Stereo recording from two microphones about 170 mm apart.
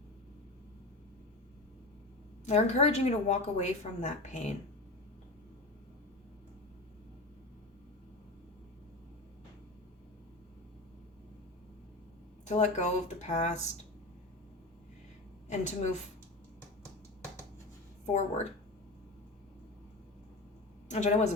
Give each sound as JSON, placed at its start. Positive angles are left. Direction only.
{"t": 2.5, "sound": "a woman's voice", "side_deg": 40}
{"t": 12.5, "sound": "a woman's voice", "side_deg": 45}
{"t": 15.4, "sound": "a woman's voice", "side_deg": 45}
{"t": 18.0, "sound": "a woman's voice", "side_deg": 45}
{"t": 20.8, "sound": "speech", "side_deg": 40}